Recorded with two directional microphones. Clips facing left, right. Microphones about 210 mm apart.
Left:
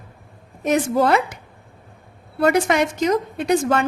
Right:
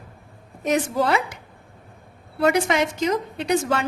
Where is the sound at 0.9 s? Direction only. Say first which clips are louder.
Left 7 dB; 55° left (ahead or behind).